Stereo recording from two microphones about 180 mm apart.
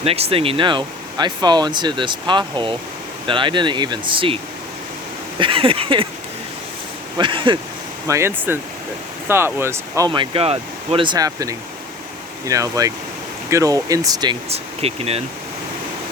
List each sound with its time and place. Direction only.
0.0 s speech: 35° right (ahead or behind)
5.4 s speech: 30° right (ahead or behind)
7.2 s speech: 30° right (ahead or behind)
8.0 s speech: 15° right (ahead or behind); by 15.2 s 35° right (ahead or behind)